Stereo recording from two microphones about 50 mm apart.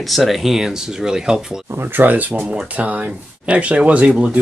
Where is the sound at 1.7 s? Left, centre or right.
Right.